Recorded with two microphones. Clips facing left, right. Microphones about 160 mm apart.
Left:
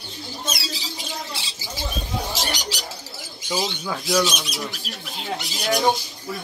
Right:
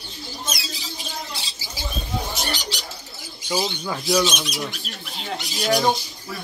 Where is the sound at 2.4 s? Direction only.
90° left.